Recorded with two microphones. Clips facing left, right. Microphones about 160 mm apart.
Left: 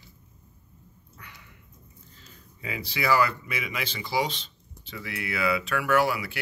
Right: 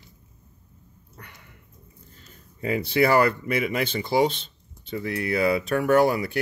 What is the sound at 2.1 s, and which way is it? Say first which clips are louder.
Speech: right 1 dB; 50° right (ahead or behind).